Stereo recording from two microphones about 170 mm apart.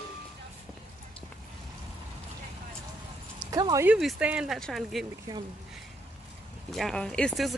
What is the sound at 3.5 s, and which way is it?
Speech, 20° right (ahead or behind).